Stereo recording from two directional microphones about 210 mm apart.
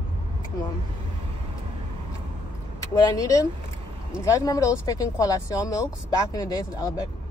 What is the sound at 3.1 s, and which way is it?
Speech, 15° left (ahead or behind).